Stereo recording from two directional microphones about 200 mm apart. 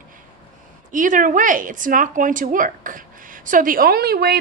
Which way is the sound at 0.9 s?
40° right (ahead or behind).